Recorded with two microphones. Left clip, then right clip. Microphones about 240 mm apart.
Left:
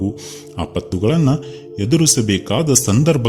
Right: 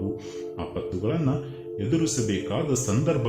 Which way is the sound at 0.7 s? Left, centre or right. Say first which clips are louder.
Left 10 dB; left.